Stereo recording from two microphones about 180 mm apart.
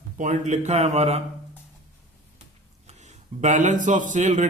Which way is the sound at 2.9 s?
40° right (ahead or behind).